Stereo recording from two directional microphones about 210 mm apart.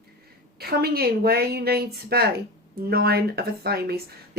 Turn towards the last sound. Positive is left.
turn(degrees=-50)  # may be behind; listen again after turning